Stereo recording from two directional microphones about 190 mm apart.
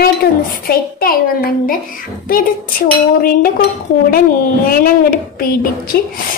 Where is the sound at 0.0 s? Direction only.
50° left (ahead or behind).